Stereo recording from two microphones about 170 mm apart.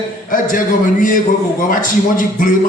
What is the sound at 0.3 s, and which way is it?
A man's voice, 50° left (ahead or behind).